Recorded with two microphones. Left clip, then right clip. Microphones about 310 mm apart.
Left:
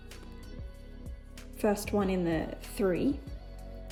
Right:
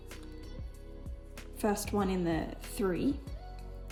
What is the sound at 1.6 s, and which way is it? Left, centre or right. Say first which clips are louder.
A woman's voice: left 3 dB; centre.